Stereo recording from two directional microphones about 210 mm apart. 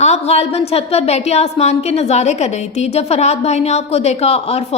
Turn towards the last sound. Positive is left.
turn(degrees=30)  # may be behind; listen again after turning